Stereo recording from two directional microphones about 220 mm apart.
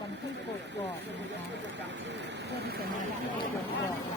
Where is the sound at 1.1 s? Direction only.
55° right (ahead or behind).